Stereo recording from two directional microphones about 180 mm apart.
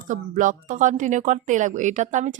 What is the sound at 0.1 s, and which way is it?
A woman's voice, 45° right (ahead or behind).